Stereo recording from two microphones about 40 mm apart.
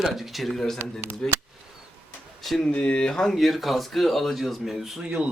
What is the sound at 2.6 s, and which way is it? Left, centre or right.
Speech, left.